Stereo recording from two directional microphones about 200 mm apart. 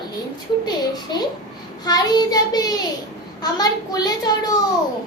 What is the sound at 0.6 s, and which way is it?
A child's voice, 20° left (ahead or behind).